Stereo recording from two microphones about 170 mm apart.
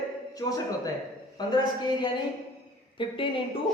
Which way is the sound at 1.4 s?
25° left (ahead or behind).